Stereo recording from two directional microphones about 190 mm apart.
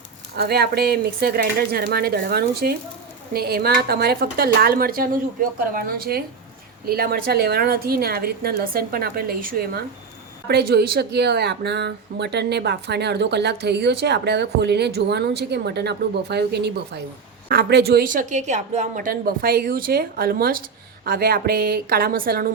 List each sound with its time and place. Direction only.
0.3 s a woman's voice: 55° right (ahead or behind)